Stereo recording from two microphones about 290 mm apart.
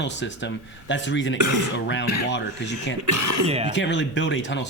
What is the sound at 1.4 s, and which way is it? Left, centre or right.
Speech, right.